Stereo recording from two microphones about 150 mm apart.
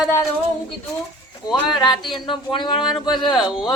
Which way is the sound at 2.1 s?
30° left (ahead or behind).